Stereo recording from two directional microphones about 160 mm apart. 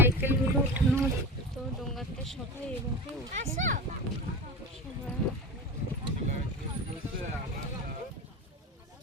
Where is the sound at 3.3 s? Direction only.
50° right (ahead or behind).